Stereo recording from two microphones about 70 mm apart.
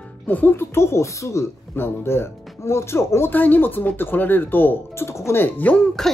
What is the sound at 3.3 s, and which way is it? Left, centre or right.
Speech, left.